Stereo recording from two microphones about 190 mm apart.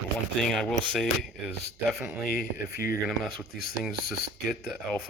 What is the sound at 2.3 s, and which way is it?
Speech, 50° left (ahead or behind).